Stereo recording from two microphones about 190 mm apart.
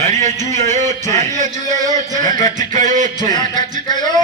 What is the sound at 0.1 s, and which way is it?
A man's voice, 40° right (ahead or behind).